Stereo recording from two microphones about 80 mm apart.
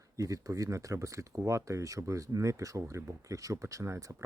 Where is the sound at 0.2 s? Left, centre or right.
Right.